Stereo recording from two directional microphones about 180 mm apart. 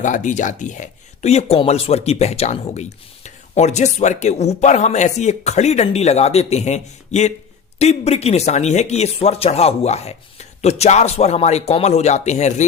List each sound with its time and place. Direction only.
0.0 s speech: 45° left (ahead or behind)